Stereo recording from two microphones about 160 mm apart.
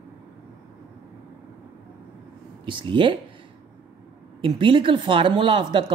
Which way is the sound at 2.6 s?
30° right (ahead or behind).